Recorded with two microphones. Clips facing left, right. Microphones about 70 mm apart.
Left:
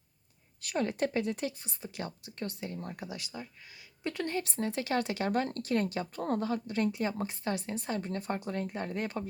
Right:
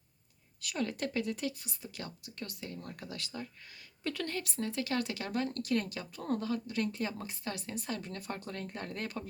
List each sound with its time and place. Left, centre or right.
0.6 s speech: left